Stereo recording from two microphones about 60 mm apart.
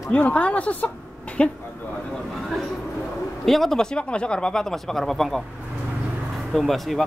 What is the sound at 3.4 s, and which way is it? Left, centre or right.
Speech, centre.